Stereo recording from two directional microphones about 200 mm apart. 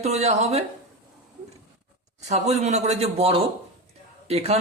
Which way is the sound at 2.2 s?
35° right (ahead or behind).